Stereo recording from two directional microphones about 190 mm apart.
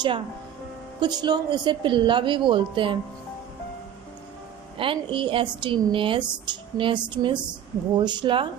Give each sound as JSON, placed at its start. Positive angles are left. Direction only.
{"t": 0.9, "sound": "speech", "side_deg": -25}
{"t": 4.8, "sound": "speech", "side_deg": -25}